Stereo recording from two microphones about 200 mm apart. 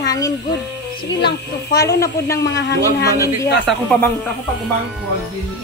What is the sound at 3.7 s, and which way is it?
Speech, centre (ahead or behind).